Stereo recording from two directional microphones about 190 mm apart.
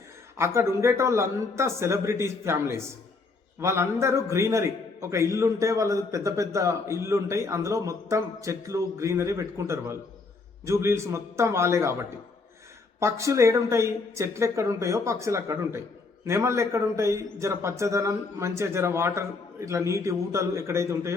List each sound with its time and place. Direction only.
0.3 s a man's voice: 15° right (ahead or behind)
13.0 s a man's voice: 15° right (ahead or behind)